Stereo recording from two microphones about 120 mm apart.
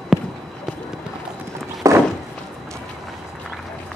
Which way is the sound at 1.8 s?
25° right (ahead or behind).